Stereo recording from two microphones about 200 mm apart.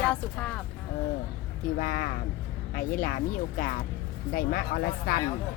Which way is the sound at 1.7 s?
45° left (ahead or behind).